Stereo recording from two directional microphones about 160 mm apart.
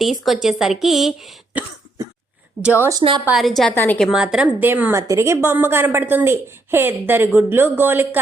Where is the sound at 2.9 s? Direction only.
30° right (ahead or behind).